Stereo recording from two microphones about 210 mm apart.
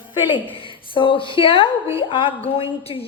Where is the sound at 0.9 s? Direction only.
25° left (ahead or behind).